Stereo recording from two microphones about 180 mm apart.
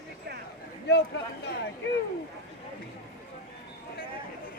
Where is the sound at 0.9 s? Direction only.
70° left (ahead or behind).